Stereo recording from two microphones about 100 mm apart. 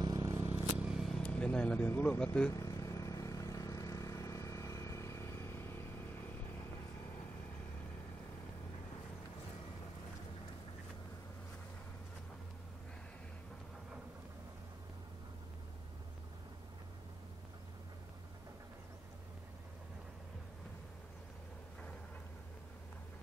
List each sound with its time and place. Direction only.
0.2 s vehicle: 30° right (ahead or behind)
0.7 s vehicle: 5° right (ahead or behind)
1.1 s speech: 10° left (ahead or behind)
2.5 s vehicle: 35° left (ahead or behind)